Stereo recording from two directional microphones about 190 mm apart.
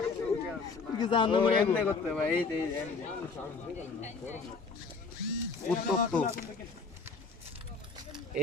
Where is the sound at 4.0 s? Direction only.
40° left (ahead or behind).